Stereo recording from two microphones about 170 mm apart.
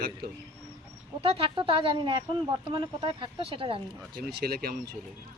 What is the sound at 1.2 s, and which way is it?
Speech, 35° right (ahead or behind).